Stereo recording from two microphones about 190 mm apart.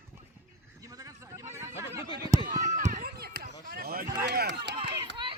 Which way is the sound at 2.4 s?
45° right (ahead or behind).